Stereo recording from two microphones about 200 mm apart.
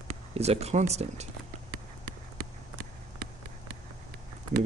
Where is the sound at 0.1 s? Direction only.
30° right (ahead or behind).